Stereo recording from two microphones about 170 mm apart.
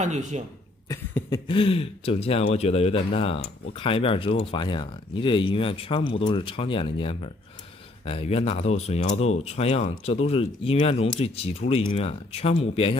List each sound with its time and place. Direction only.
0.0 s speech: 45° right (ahead or behind)
0.8 s cough: 20° left (ahead or behind)
1.6 s speech: 35° left (ahead or behind)